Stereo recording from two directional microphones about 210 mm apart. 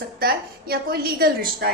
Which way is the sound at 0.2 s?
45° right (ahead or behind).